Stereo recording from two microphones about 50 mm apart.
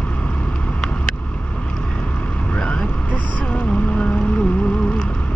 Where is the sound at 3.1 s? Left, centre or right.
Left.